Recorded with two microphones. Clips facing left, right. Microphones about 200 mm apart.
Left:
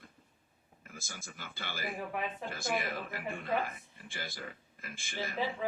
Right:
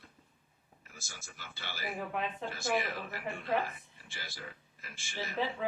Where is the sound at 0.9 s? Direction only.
50° left (ahead or behind).